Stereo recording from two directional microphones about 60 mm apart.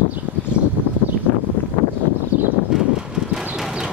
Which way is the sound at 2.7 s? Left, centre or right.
Centre.